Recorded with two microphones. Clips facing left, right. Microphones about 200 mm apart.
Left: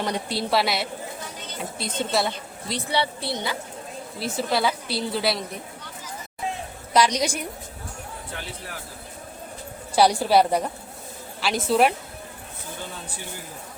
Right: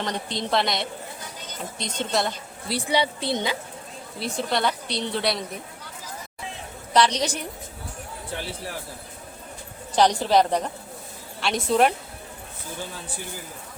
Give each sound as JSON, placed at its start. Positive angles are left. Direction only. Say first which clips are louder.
{"t": 0.0, "sound": "a woman's voice", "louder": "left 2 dB", "side_deg": 10}
{"t": 2.7, "sound": "a woman's voice", "louder": "right 2 dB", "side_deg": -15}
{"t": 4.2, "sound": "a woman's voice", "louder": "left 1 dB", "side_deg": 5}
{"t": 6.9, "sound": "a woman's voice", "louder": "even", "side_deg": 10}
{"t": 9.9, "sound": "a woman's voice", "louder": "left 1 dB", "side_deg": 10}